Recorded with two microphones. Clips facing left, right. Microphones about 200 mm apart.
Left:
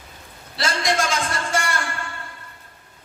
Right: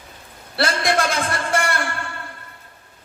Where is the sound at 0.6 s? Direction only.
60° right (ahead or behind).